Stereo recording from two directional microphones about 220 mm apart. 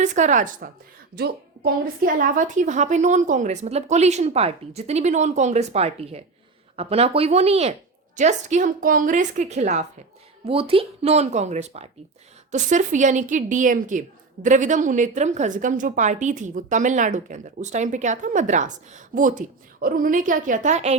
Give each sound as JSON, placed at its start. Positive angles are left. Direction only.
{"t": 0.0, "sound": "a woman's voice", "side_deg": -35}